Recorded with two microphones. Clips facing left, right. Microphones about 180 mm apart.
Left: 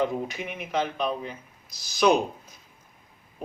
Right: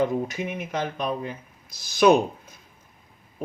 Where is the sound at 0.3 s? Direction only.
45° right (ahead or behind).